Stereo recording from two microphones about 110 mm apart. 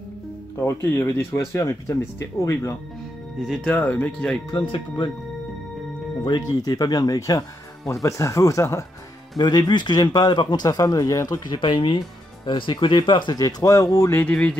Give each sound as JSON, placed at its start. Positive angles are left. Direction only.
{"t": 0.6, "sound": "speech", "side_deg": 25}
{"t": 3.6, "sound": "speech", "side_deg": 15}
{"t": 4.6, "sound": "speech", "side_deg": 40}
{"t": 6.2, "sound": "speech", "side_deg": 40}
{"t": 9.4, "sound": "speech", "side_deg": 40}
{"t": 13.4, "sound": "speech", "side_deg": 30}
{"t": 14.1, "sound": "speech", "side_deg": 10}